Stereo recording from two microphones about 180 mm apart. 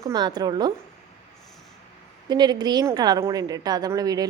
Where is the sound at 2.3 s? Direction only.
25° right (ahead or behind).